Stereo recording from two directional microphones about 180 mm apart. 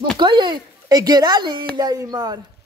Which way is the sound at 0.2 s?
25° right (ahead or behind).